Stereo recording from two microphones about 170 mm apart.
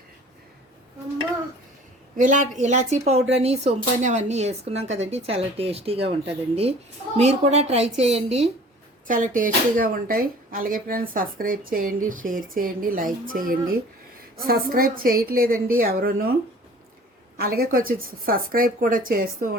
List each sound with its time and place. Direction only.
2.1 s a woman's voice: 45° right (ahead or behind)
9.0 s speech: 50° right (ahead or behind)
17.3 s speech: 60° right (ahead or behind)